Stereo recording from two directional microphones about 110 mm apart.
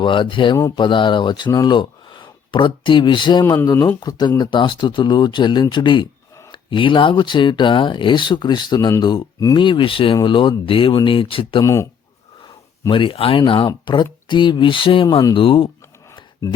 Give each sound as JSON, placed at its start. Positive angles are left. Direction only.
{"t": 0.0, "sound": "speech", "side_deg": 50}
{"t": 3.7, "sound": "speech", "side_deg": 30}
{"t": 11.6, "sound": "speech", "side_deg": 25}
{"t": 12.9, "sound": "speech", "side_deg": 50}